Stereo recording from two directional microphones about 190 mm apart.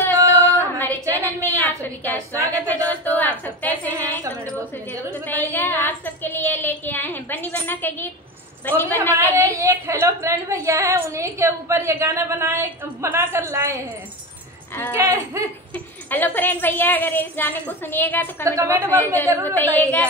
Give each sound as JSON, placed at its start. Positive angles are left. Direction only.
{"t": 0.0, "sound": "female singing", "side_deg": 10}
{"t": 1.6, "sound": "a woman's voice", "side_deg": 10}
{"t": 9.2, "sound": "a woman's voice", "side_deg": -15}
{"t": 15.0, "sound": "a woman's voice", "side_deg": -15}
{"t": 15.7, "sound": "a woman's voice", "side_deg": 10}
{"t": 18.4, "sound": "a woman's voice", "side_deg": -15}
{"t": 19.4, "sound": "a woman's voice", "side_deg": 10}